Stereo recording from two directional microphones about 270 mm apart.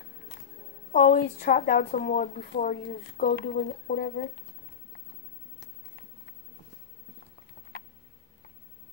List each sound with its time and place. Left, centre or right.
0.9 s a woman's voice: left